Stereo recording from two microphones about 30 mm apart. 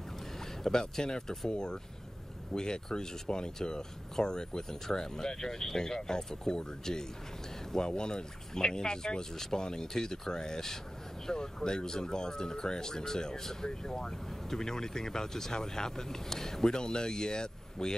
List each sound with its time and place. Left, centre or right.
0.7 s speech: left